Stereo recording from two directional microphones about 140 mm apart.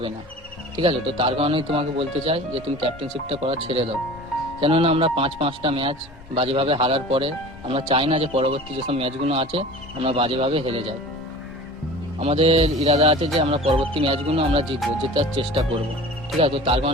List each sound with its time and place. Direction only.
0.8 s a man's voice: 40° right (ahead or behind)
12.2 s a man's voice: 45° right (ahead or behind)